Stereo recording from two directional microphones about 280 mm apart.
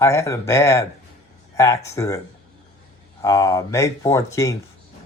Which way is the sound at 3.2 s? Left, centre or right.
Centre.